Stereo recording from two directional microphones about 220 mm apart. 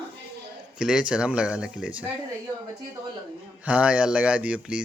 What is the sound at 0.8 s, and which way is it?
Speech, 5° right (ahead or behind).